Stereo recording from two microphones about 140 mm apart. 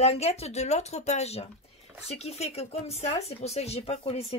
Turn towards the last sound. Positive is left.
turn(degrees=45)  # may be behind; listen again after turning